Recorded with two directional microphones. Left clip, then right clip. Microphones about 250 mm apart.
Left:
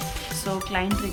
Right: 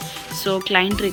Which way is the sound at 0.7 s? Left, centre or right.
Centre.